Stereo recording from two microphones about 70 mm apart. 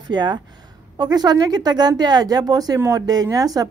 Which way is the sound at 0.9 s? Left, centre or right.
Right.